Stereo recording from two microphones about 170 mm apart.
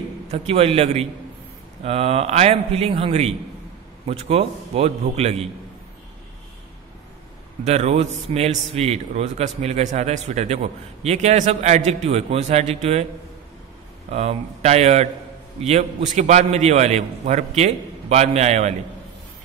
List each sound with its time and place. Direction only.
0.3 s a man's voice: 35° right (ahead or behind)
7.6 s a man's voice: 40° right (ahead or behind)
14.1 s a man's voice: 40° right (ahead or behind)